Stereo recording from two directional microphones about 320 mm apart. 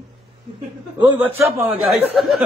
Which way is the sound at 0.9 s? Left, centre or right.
Centre.